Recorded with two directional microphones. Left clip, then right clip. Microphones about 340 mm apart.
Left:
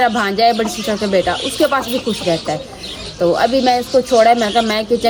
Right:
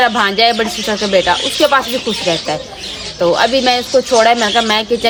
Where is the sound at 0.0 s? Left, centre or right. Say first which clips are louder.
Right 2 dB; centre.